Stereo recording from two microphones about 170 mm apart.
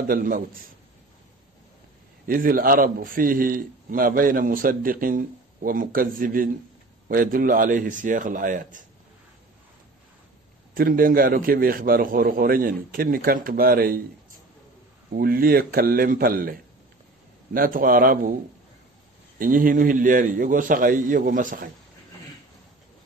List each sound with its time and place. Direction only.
0.1 s a man's voice: 55° right (ahead or behind)
2.2 s a man's voice: 55° right (ahead or behind)
10.7 s a man's voice: 60° right (ahead or behind)
15.1 s a man's voice: 60° right (ahead or behind)
17.6 s a man's voice: 55° right (ahead or behind)
19.3 s a man's voice: 55° right (ahead or behind)